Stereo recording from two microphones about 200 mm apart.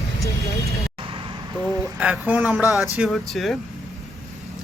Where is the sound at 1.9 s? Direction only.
5° right (ahead or behind).